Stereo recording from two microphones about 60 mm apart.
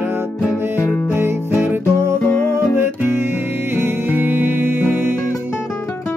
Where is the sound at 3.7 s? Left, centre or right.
Right.